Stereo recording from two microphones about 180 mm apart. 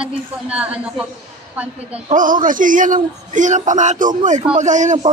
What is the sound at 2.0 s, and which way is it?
Speech, 45° right (ahead or behind).